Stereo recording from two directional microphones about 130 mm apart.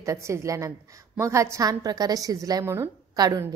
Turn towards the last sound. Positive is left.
turn(degrees=-30)  # may be behind; listen again after turning